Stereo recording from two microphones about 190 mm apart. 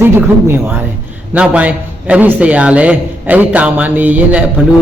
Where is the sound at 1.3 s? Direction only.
5° right (ahead or behind).